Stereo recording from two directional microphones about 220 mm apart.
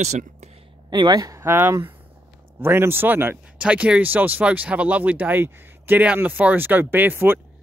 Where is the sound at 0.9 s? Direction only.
20° right (ahead or behind).